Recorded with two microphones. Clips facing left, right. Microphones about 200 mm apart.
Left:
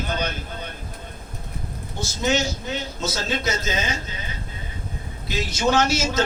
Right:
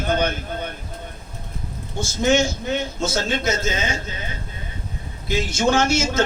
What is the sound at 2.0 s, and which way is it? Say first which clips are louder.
A man's voice: right 4 dB; 50° right (ahead or behind).